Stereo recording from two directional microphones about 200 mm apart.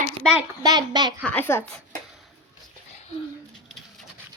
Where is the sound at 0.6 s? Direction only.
20° right (ahead or behind).